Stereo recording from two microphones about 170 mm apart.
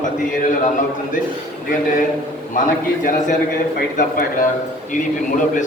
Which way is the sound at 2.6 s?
55° left (ahead or behind).